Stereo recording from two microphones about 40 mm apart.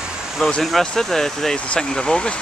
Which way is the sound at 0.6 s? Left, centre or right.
Centre.